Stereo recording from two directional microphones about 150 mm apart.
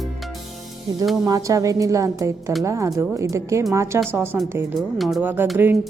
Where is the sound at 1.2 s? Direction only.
25° right (ahead or behind).